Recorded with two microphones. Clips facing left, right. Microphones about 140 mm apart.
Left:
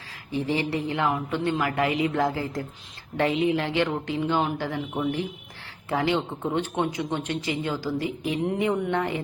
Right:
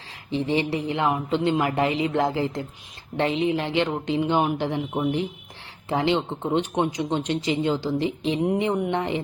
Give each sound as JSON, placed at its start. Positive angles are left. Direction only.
{"t": 0.3, "sound": "speech", "side_deg": -20}